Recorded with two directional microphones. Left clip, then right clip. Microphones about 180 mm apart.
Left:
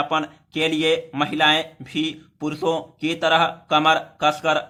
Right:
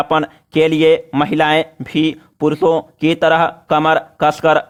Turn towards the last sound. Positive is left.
turn(degrees=-50)  # may be behind; listen again after turning